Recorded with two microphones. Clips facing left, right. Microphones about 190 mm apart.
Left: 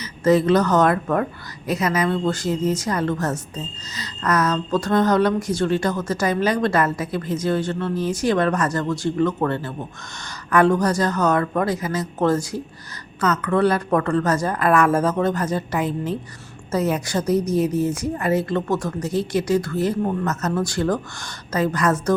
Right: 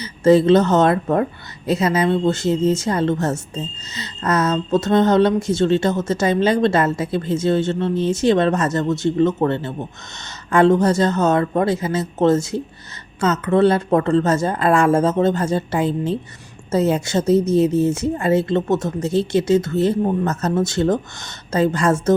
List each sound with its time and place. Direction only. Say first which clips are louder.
0.0 s a woman's voice: right 4 dB; 30° right (ahead or behind)